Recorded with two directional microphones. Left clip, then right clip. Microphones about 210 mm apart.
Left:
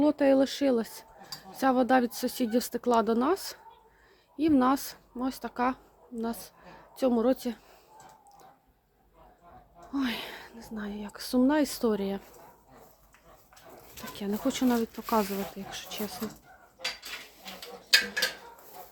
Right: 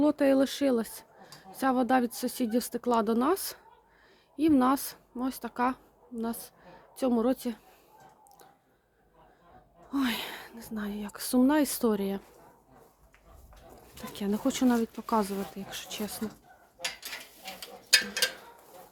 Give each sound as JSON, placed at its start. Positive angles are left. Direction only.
{"t": 0.0, "sound": "a woman's voice", "side_deg": -15}
{"t": 9.9, "sound": "speech", "side_deg": -20}
{"t": 14.1, "sound": "speech", "side_deg": -20}